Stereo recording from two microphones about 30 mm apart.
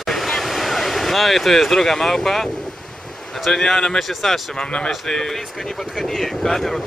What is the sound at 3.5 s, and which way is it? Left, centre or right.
Speech, centre.